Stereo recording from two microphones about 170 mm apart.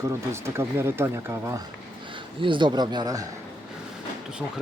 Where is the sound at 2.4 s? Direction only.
30° right (ahead or behind).